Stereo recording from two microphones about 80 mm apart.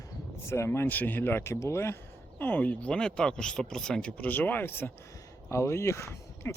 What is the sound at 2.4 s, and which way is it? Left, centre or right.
Speech, left.